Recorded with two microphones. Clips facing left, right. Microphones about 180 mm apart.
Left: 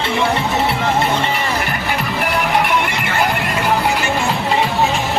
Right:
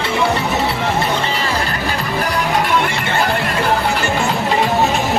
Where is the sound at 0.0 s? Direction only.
20° left (ahead or behind).